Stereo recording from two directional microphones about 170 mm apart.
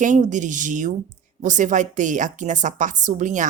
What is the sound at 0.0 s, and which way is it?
A woman's voice, 45° right (ahead or behind).